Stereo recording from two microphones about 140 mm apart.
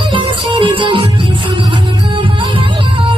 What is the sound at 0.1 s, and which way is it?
Music, 35° right (ahead or behind).